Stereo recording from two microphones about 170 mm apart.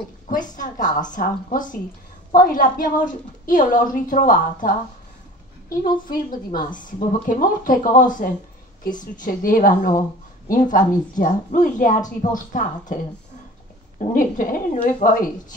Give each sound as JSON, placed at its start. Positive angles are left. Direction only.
{"t": 0.3, "sound": "a woman's voice", "side_deg": 50}
{"t": 6.1, "sound": "a woman's voice", "side_deg": 55}